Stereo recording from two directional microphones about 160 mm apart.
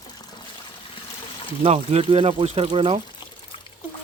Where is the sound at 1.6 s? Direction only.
35° right (ahead or behind).